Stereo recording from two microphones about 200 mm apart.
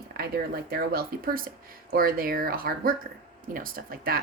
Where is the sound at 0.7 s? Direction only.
50° right (ahead or behind).